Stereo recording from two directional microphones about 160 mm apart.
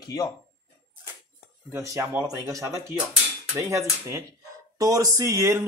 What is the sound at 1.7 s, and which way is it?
Speech, 20° right (ahead or behind).